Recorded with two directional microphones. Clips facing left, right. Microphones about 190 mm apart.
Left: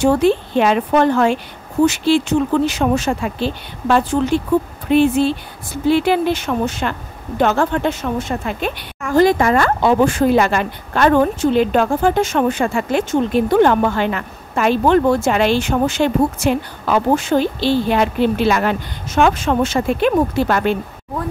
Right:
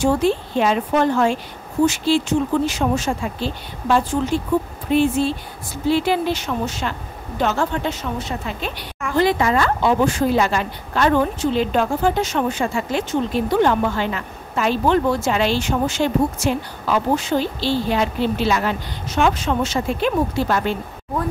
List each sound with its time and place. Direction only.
0.0 s speech: 65° left (ahead or behind)